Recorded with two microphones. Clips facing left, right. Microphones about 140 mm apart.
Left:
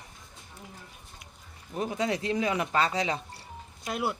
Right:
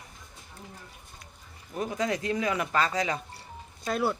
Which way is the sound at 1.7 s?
25° left (ahead or behind).